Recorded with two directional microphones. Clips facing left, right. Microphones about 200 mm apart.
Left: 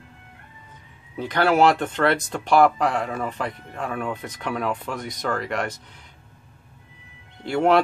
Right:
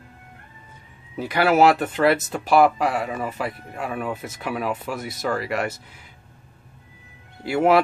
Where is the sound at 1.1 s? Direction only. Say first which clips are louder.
Right 1 dB; 10° right (ahead or behind).